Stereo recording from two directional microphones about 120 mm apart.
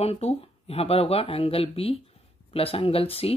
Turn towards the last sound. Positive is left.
turn(degrees=55)  # may be behind; listen again after turning